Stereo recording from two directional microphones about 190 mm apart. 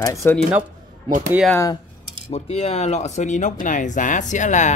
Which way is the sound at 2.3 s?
35° left (ahead or behind).